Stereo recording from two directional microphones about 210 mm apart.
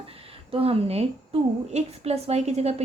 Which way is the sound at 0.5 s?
25° right (ahead or behind).